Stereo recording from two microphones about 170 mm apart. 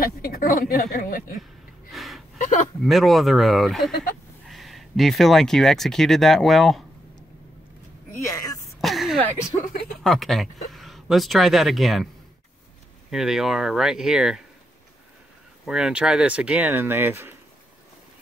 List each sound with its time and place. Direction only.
0.0 s a woman's voice: 60° left (ahead or behind)
1.9 s gasp: centre (ahead or behind)
2.3 s a sound: 50° left (ahead or behind)
2.8 s speech: centre (ahead or behind)
8.2 s a sound: 20° left (ahead or behind)
8.8 s a sound: centre (ahead or behind)
10.0 s speech: centre (ahead or behind)
13.1 s speech: centre (ahead or behind)
15.6 s speech: 5° right (ahead or behind)